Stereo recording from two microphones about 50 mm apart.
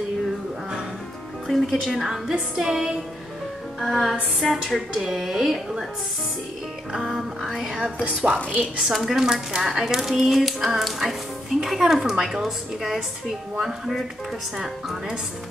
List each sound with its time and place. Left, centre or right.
1.5 s a woman's voice: centre
6.9 s speech: centre
7.4 s a woman's voice: centre
8.0 s a woman's voice: right